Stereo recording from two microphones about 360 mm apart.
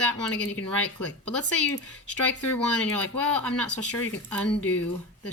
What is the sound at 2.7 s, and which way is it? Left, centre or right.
Speech, centre.